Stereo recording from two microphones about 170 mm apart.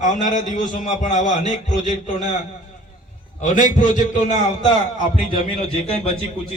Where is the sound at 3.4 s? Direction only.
50° left (ahead or behind).